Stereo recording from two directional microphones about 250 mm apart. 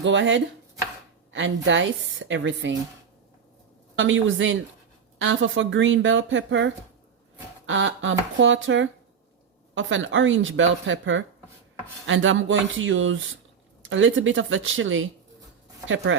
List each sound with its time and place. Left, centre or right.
0.0 s speech: right
3.9 s speech: right
7.7 s speech: right